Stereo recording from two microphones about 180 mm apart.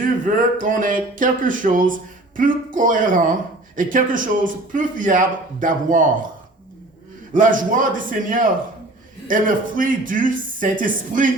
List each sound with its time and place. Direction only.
0.3 s speech: 50° right (ahead or behind)
7.3 s speech: 45° right (ahead or behind)